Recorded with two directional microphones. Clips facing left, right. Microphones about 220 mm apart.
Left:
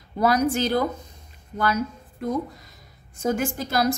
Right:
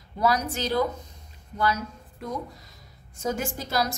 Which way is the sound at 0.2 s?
55° left (ahead or behind).